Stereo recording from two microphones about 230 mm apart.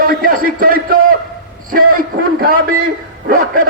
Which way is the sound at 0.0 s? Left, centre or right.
Right.